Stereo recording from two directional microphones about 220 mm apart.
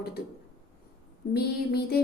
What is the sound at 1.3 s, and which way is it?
Speech, 45° left (ahead or behind).